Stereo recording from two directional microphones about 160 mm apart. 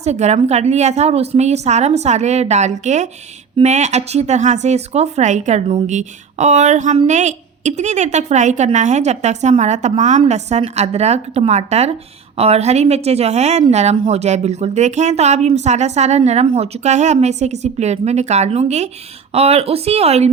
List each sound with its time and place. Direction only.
0.0 s a woman's voice: 45° right (ahead or behind)